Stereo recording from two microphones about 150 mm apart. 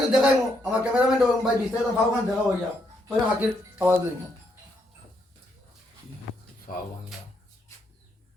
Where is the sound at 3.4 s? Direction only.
10° right (ahead or behind).